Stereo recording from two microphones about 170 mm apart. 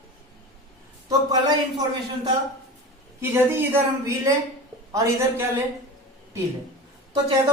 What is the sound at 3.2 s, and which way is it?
A man's voice, 15° right (ahead or behind).